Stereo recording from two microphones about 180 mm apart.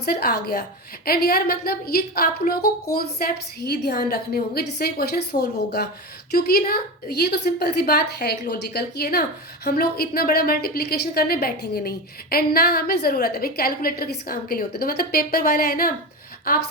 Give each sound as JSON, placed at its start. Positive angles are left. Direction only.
{"t": 0.0, "sound": "a woman's voice", "side_deg": 60}